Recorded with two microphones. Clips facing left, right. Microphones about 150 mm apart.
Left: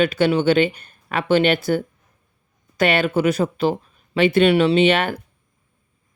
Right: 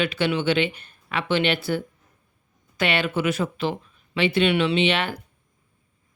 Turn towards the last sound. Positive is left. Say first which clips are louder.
# left 6 dB
turn(degrees=45)  # may be behind; listen again after turning